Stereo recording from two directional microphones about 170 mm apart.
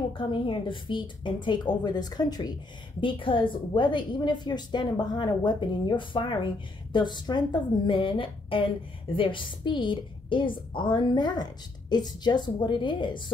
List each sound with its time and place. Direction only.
0.2 s a woman's voice: 30° left (ahead or behind)